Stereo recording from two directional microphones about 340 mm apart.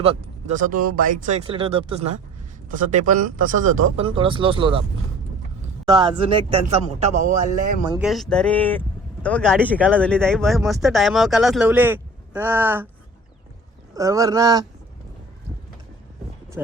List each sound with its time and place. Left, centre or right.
0.0 s speech: centre
5.9 s speech: centre
7.9 s speech: centre
13.9 s speech: centre